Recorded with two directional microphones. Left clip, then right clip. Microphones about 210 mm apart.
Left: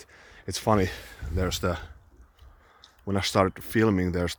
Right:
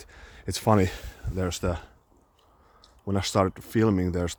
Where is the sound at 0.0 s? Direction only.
20° right (ahead or behind).